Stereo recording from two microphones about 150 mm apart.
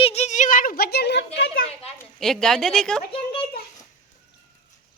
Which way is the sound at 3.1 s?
35° left (ahead or behind).